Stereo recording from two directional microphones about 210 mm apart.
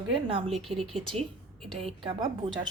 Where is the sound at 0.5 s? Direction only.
Centre (ahead or behind).